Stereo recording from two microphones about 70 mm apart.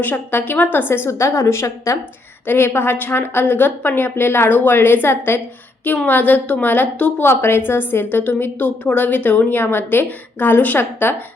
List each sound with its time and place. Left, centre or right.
0.0 s a woman's voice: left
2.5 s a woman's voice: left